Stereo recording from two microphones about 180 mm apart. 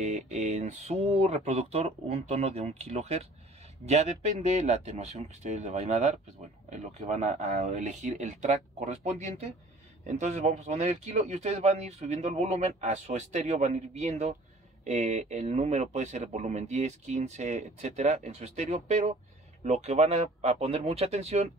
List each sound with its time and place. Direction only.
0.0 s a man's voice: 40° right (ahead or behind)